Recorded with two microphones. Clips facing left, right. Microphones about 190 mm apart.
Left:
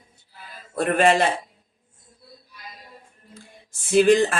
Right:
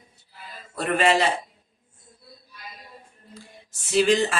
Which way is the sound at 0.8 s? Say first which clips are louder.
Left 3 dB; 50° left (ahead or behind).